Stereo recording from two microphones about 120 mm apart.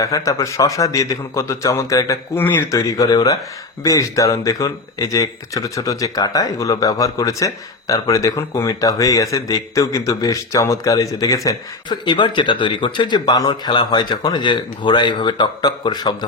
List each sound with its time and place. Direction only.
0.0 s speech: 25° left (ahead or behind)
2.4 s speech: 15° left (ahead or behind)
2.7 s speech: 30° left (ahead or behind)
11.4 s speech: 40° left (ahead or behind)